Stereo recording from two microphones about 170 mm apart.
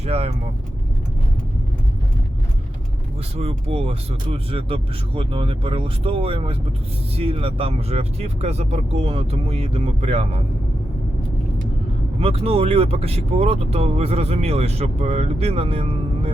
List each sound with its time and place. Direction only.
0.0 s speech: 35° right (ahead or behind)
3.3 s speech: 35° right (ahead or behind)
12.2 s speech: 35° right (ahead or behind)